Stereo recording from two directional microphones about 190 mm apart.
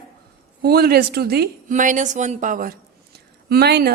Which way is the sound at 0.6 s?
55° right (ahead or behind).